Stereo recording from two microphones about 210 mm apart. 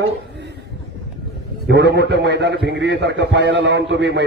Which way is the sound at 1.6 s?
55° right (ahead or behind).